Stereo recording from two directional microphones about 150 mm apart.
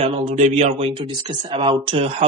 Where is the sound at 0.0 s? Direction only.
50° right (ahead or behind).